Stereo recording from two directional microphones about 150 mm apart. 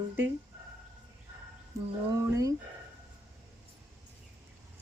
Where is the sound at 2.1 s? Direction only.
20° right (ahead or behind).